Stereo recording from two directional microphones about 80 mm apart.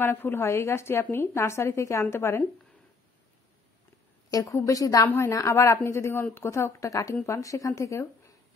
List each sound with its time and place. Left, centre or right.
0.0 s a woman's voice: left
4.3 s a woman's voice: left
5.0 s a woman's voice: left